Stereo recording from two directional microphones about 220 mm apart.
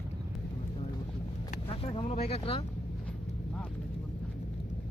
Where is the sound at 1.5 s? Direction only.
25° left (ahead or behind).